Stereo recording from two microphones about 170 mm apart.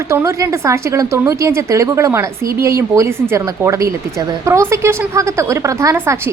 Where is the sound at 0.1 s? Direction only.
15° right (ahead or behind).